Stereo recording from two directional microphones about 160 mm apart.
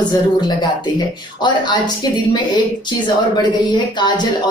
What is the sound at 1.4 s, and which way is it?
Speech, 25° left (ahead or behind).